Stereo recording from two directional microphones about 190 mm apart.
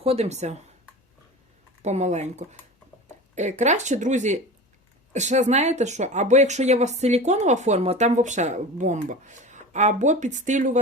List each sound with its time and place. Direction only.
0.0 s speech: 30° right (ahead or behind)
1.8 s speech: 35° right (ahead or behind)